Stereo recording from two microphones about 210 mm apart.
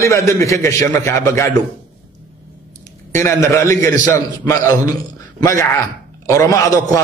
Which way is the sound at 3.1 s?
15° left (ahead or behind).